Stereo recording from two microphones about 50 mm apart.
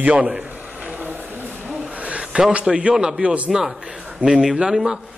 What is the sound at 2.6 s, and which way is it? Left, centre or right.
A man's voice, centre.